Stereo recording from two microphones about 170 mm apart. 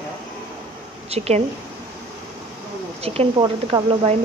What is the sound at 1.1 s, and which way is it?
Speech, 40° right (ahead or behind).